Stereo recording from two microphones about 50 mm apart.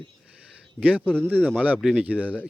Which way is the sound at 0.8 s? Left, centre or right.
Right.